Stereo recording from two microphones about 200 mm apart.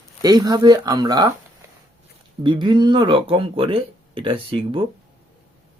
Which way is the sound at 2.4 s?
25° right (ahead or behind).